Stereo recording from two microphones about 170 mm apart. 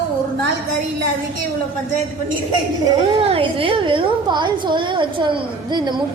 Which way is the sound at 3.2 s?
35° right (ahead or behind).